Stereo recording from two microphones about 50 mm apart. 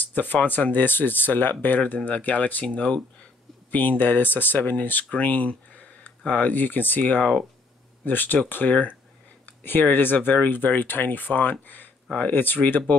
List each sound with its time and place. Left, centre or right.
0.0 s speech: left
3.7 s speech: left